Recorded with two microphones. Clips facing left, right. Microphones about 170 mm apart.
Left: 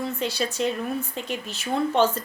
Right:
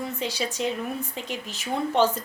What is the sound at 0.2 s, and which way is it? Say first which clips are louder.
A woman's voice: left 2 dB; 15° right (ahead or behind).